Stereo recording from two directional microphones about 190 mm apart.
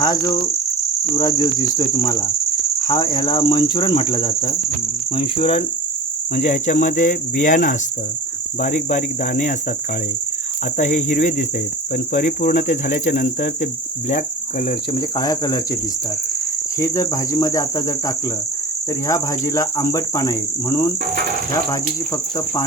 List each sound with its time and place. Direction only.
0.0 s cricket: 20° left (ahead or behind)
6.3 s speech: 40° left (ahead or behind)
10.8 s speech: 40° left (ahead or behind)
14.9 s cricket: 20° left (ahead or behind)
16.8 s cricket: 15° left (ahead or behind)